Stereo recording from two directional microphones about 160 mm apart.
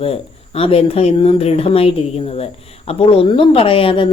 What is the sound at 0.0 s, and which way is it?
Speech, 35° left (ahead or behind).